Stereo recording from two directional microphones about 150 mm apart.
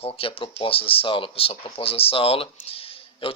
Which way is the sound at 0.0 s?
40° left (ahead or behind).